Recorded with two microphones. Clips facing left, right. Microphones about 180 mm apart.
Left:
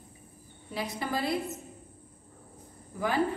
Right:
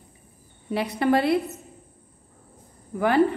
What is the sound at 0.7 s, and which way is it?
Speech, 65° right (ahead or behind).